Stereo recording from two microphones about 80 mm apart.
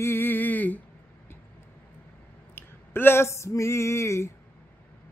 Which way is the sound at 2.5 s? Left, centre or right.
Left.